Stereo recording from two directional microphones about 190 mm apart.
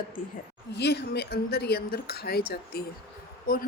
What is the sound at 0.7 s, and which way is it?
Speech, 60° left (ahead or behind).